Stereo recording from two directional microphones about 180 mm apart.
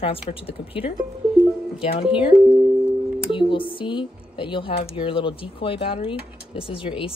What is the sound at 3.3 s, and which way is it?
Speech, 25° left (ahead or behind).